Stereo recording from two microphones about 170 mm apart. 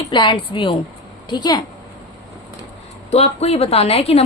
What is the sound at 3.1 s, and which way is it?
A woman's voice, 35° left (ahead or behind).